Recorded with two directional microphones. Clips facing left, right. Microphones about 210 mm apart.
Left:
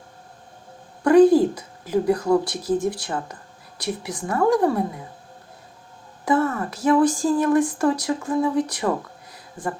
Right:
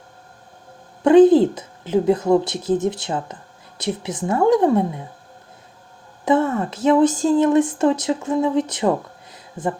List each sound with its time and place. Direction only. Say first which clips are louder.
1.0 s a woman's voice: right 3 dB; 25° right (ahead or behind)
6.2 s speech: right 3 dB; 25° right (ahead or behind)